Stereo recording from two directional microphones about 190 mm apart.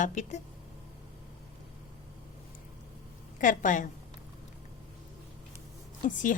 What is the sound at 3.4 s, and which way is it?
Speech, 45° left (ahead or behind).